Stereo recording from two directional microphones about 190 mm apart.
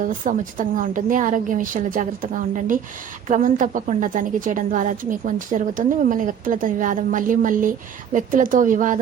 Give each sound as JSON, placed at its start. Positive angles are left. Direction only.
{"t": 0.0, "sound": "a woman's voice", "side_deg": -45}